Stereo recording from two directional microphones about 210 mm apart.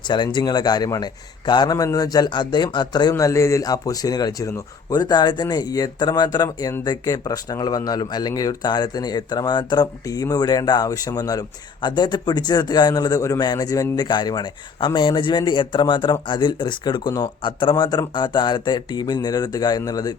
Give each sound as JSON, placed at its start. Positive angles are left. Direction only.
{"t": 0.1, "sound": "a man's voice", "side_deg": 20}